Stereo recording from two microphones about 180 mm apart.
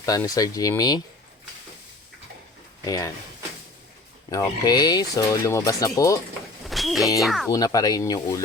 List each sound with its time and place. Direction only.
0.0 s speech: 20° left (ahead or behind)
2.8 s speech: 20° left (ahead or behind)
4.3 s speech: 20° left (ahead or behind)
6.7 s a sound: centre (ahead or behind)
7.2 s speech: centre (ahead or behind)
7.5 s speech: 20° left (ahead or behind)